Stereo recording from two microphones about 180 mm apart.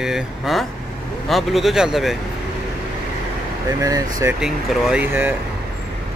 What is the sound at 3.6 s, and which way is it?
Speech, 20° right (ahead or behind).